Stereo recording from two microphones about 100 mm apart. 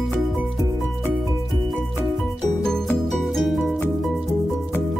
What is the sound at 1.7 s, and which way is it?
Music, centre (ahead or behind).